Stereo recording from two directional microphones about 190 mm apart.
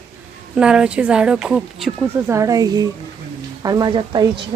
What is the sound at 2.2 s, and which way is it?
Speech, 15° right (ahead or behind).